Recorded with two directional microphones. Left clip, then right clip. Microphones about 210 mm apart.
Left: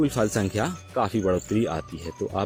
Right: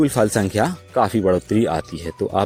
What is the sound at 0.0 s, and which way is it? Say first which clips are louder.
Speech: right 6 dB; 35° right (ahead or behind).